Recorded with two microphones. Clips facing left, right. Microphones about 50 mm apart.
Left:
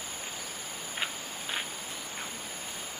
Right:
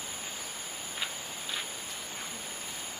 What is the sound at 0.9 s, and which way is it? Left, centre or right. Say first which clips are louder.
Insect: left 3 dB; left.